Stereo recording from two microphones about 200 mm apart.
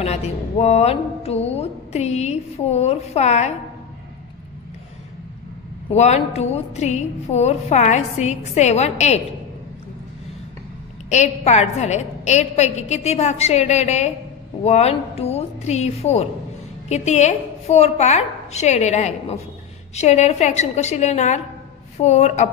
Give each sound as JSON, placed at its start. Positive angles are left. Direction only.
{"t": 0.0, "sound": "speech", "side_deg": 30}
{"t": 5.9, "sound": "a woman's voice", "side_deg": 30}
{"t": 11.1, "sound": "a woman's voice", "side_deg": 35}